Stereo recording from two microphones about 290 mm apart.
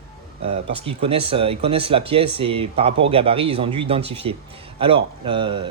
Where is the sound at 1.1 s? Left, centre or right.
Centre.